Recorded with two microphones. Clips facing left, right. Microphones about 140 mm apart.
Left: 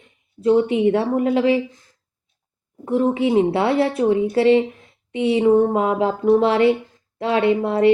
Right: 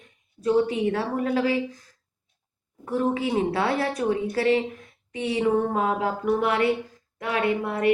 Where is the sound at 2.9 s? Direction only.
25° left (ahead or behind).